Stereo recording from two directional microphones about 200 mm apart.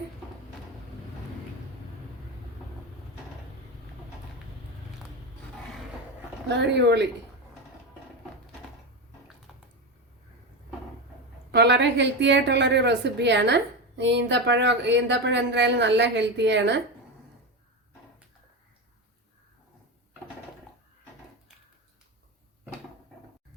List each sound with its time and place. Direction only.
6.5 s a woman's voice: 60° right (ahead or behind)
9.5 s a sound: centre (ahead or behind)
11.5 s a woman's voice: 55° right (ahead or behind)